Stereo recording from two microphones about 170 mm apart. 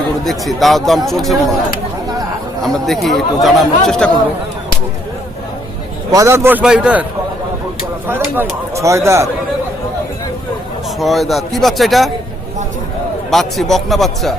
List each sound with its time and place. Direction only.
0.3 s speech: centre (ahead or behind)
2.6 s speech: centre (ahead or behind)
6.1 s speech: 20° right (ahead or behind)
8.0 s speech: 10° right (ahead or behind)
11.0 s speech: centre (ahead or behind)
13.3 s speech: centre (ahead or behind)